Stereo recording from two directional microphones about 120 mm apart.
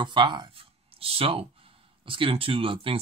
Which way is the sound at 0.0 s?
40° right (ahead or behind).